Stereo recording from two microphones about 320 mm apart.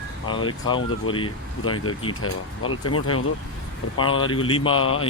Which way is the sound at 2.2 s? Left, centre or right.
Left.